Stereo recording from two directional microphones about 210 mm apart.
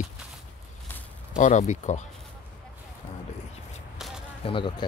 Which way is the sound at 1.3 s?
35° left (ahead or behind).